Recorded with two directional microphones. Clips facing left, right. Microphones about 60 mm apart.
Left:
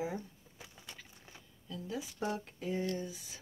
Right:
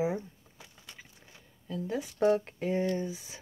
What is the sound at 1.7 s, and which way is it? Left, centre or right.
Speech, right.